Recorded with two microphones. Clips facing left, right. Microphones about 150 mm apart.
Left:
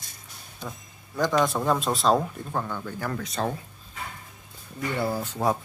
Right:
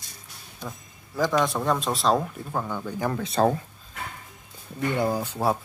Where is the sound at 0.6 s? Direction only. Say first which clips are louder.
Even; centre (ahead or behind).